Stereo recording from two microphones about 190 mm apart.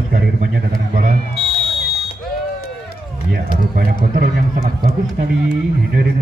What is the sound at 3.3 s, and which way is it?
A man's voice, 55° right (ahead or behind).